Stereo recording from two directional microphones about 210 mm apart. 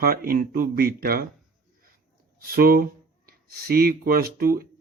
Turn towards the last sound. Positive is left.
turn(degrees=-45)  # may be behind; listen again after turning